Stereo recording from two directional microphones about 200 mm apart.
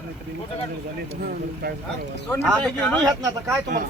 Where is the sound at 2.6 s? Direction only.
5° left (ahead or behind).